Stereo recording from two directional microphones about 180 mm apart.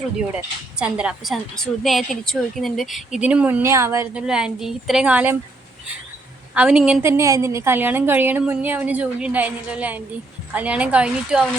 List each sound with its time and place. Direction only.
0.8 s a woman's voice: 5° right (ahead or behind)
6.5 s a woman's voice: 5° right (ahead or behind)